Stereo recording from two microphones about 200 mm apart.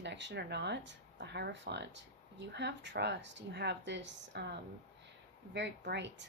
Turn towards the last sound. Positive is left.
turn(degrees=-60)  # may be behind; listen again after turning